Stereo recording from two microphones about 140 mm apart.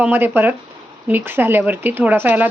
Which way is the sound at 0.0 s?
15° right (ahead or behind).